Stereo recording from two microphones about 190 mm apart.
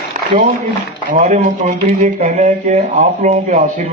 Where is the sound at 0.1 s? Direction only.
45° right (ahead or behind).